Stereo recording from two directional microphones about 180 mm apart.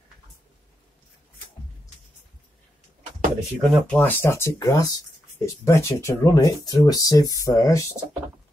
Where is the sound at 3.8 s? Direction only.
10° left (ahead or behind).